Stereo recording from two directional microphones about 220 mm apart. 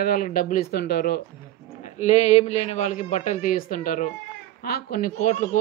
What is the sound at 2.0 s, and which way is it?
A woman's voice, 30° left (ahead or behind).